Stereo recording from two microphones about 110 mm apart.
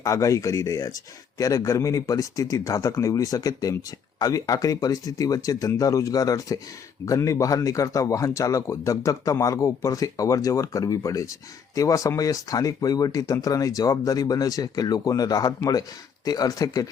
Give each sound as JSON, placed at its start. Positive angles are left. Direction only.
{"t": 0.0, "sound": "speech", "side_deg": 30}